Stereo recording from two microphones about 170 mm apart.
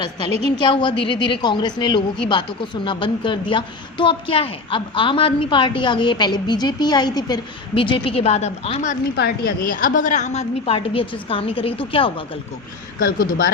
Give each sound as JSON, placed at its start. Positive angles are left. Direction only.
{"t": 0.0, "sound": "a woman's voice", "side_deg": 25}
{"t": 9.1, "sound": "a woman's voice", "side_deg": 65}
{"t": 13.0, "sound": "speech", "side_deg": 55}